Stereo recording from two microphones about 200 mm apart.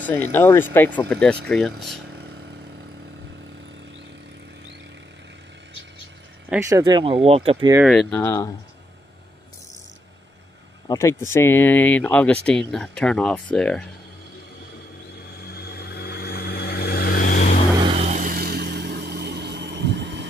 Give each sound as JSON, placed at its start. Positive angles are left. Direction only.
{"t": 0.0, "sound": "speech", "side_deg": 10}
{"t": 2.0, "sound": "vehicle", "side_deg": -55}
{"t": 6.5, "sound": "speech", "side_deg": -15}
{"t": 7.8, "sound": "speech", "side_deg": 0}
{"t": 10.9, "sound": "speech", "side_deg": 15}
{"t": 15.4, "sound": "vehicle", "side_deg": 50}
{"t": 17.7, "sound": "vehicle", "side_deg": -30}